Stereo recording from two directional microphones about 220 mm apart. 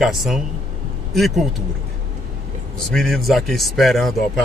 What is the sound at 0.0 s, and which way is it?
Speech, centre (ahead or behind).